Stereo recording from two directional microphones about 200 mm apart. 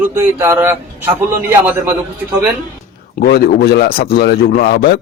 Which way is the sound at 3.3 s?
50° left (ahead or behind).